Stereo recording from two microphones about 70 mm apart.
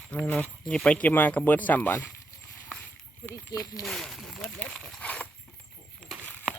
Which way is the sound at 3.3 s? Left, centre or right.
Left.